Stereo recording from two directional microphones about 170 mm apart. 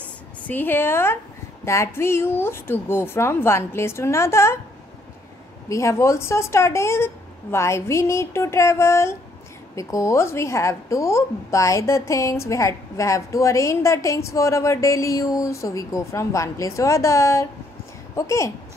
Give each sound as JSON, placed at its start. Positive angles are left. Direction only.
{"t": 0.5, "sound": "a woman's voice", "side_deg": 10}
{"t": 5.7, "sound": "a woman's voice", "side_deg": 15}